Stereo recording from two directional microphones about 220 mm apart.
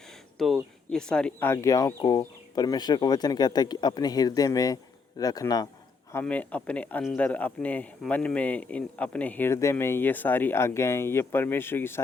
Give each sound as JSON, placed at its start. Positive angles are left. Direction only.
{"t": 0.3, "sound": "a man's voice", "side_deg": 0}